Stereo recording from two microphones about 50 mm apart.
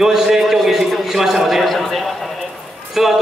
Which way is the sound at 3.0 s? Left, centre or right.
Centre.